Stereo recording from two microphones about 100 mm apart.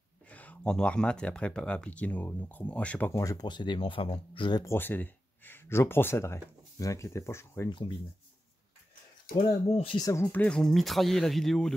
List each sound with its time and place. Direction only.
0.3 s speech: 15° left (ahead or behind)
3.1 s speech: 30° left (ahead or behind)
3.4 s speech: 50° left (ahead or behind)
4.6 s speech: 20° left (ahead or behind)
7.7 s speech: 55° left (ahead or behind)
9.9 s speech: 35° left (ahead or behind)
10.3 s speech: 10° left (ahead or behind)